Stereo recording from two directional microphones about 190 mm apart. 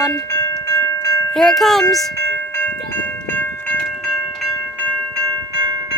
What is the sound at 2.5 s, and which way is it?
Train, 10° left (ahead or behind).